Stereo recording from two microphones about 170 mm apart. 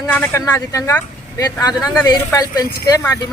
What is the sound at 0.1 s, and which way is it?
Speech, 15° left (ahead or behind).